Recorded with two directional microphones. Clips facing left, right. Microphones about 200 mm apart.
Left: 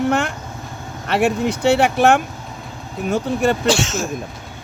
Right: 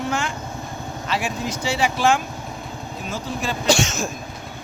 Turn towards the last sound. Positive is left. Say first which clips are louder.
# left 2 dB
turn(degrees=0)  # may be behind; listen again after turning